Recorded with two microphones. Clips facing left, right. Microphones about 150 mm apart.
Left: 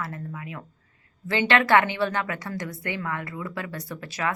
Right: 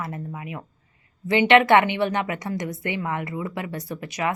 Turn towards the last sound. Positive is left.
turn(degrees=-20)  # may be behind; listen again after turning